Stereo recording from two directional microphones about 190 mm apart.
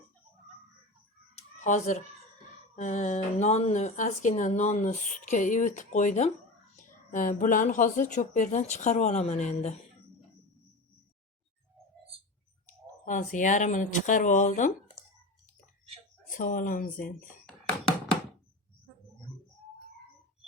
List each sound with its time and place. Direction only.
1.4 s a sound: 40° left (ahead or behind)
2.7 s speech: 40° left (ahead or behind)
13.1 s speech: 40° left (ahead or behind)
16.3 s speech: 45° left (ahead or behind)